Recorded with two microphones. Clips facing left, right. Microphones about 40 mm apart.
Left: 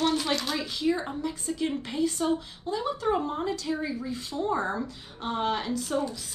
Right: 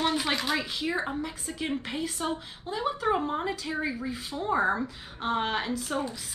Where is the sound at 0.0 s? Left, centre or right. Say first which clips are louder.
Left 1 dB; centre.